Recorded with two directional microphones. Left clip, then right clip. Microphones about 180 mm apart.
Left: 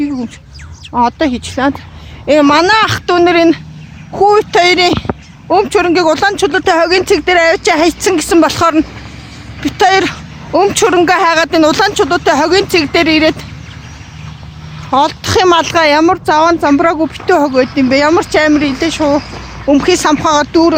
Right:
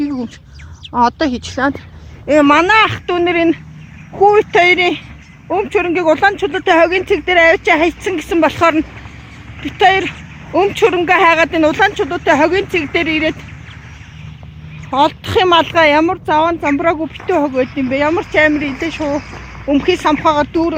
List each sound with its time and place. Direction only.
0.0 s bird: centre (ahead or behind)
0.9 s speech: 5° left (ahead or behind)
2.2 s speech: 15° left (ahead or behind)
9.6 s speech: 30° left (ahead or behind)
14.8 s speech: 15° left (ahead or behind)
18.7 s speech: 60° left (ahead or behind)
19.6 s speech: 20° left (ahead or behind)